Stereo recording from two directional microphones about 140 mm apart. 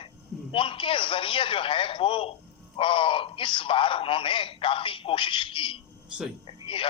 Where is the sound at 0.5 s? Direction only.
40° left (ahead or behind).